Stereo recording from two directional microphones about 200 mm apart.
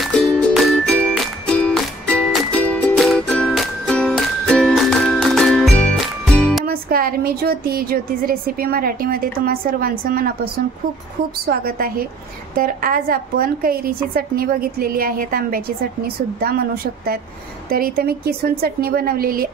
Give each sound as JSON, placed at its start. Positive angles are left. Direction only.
{"t": 0.0, "sound": "music", "side_deg": 5}
{"t": 6.6, "sound": "a woman's voice", "side_deg": -45}